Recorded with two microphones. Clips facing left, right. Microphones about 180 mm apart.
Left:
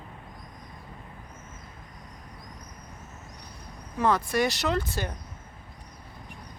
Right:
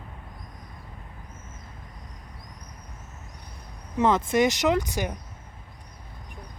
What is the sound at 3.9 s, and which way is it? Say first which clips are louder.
Speech: right 3 dB; 20° right (ahead or behind).